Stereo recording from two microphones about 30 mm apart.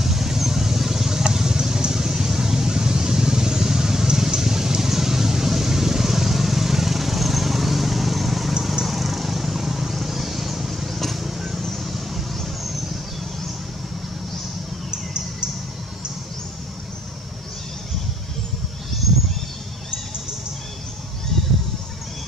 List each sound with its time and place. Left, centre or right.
0.0 s vehicle: centre